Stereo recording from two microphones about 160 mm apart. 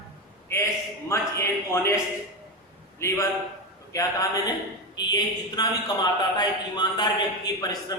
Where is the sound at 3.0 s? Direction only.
15° left (ahead or behind).